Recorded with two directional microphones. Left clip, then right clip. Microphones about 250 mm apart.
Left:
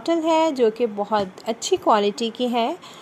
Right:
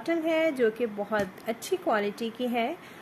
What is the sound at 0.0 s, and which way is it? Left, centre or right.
Speech, left.